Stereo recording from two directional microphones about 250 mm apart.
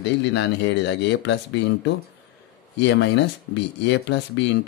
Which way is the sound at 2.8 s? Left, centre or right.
Left.